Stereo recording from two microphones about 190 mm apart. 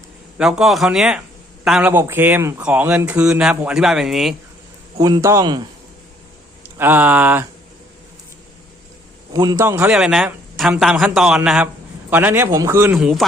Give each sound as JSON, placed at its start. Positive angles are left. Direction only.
{"t": 0.3, "sound": "speech", "side_deg": -5}
{"t": 4.9, "sound": "a man's voice", "side_deg": -20}
{"t": 9.3, "sound": "speech", "side_deg": -20}